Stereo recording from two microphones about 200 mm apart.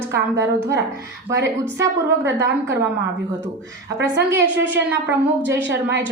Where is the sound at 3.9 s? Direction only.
60° right (ahead or behind).